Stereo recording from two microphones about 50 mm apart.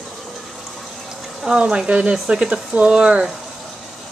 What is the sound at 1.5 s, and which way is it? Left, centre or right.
Speech, right.